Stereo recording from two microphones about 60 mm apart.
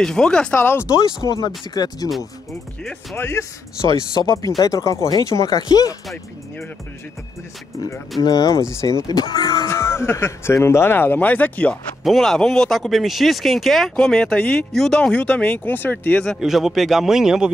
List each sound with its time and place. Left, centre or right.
0.0 s speech: centre
0.6 s speech: left
0.9 s speech: left
2.8 s speech: centre
3.2 s speech: left
3.9 s speech: left
4.6 s speech: left
8.2 s speech: left
8.8 s speech: left
9.7 s speech: left
12.0 s speech: centre
15.0 s speech: centre
15.7 s speech: left
16.3 s a man's voice: centre